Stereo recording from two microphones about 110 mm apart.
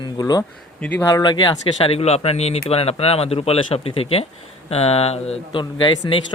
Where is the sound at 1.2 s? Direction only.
45° left (ahead or behind).